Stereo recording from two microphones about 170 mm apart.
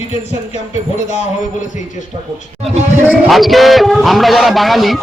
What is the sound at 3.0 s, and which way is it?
A man's voice, centre (ahead or behind).